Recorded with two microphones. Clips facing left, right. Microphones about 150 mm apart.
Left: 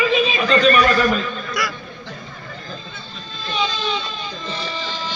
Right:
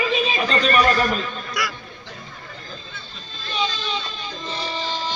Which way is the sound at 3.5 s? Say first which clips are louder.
Left 3 dB; 40° right (ahead or behind).